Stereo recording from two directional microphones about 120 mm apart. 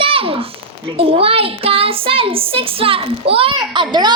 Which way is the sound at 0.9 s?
50° right (ahead or behind).